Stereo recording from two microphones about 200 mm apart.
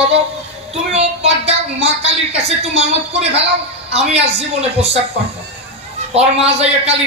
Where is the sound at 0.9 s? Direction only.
30° right (ahead or behind).